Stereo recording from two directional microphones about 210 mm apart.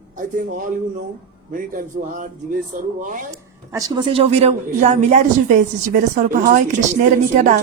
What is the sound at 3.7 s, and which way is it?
Speech, 20° right (ahead or behind).